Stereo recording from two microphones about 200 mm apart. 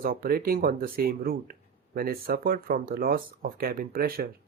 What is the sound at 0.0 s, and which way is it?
Speech, 45° right (ahead or behind).